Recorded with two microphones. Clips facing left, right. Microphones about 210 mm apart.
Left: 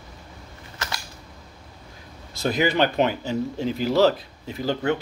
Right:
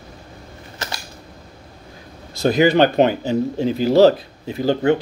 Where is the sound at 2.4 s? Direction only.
35° right (ahead or behind).